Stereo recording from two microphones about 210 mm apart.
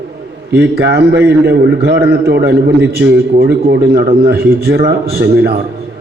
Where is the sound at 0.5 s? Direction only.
55° right (ahead or behind).